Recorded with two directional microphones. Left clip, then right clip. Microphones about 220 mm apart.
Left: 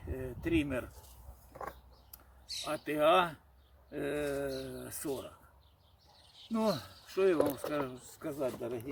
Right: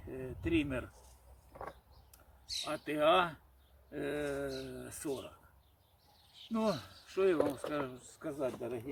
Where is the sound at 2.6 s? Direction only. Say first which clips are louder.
Left 2 dB; 10° left (ahead or behind).